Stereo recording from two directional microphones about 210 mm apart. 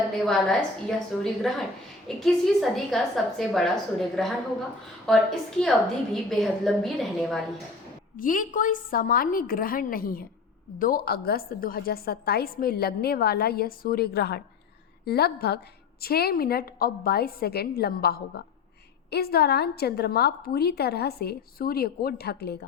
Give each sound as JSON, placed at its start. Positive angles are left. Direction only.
{"t": 0.3, "sound": "a woman's voice", "side_deg": 0}
{"t": 8.1, "sound": "a woman's voice", "side_deg": 40}